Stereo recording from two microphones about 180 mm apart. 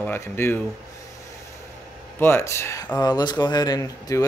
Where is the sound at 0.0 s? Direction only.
15° left (ahead or behind).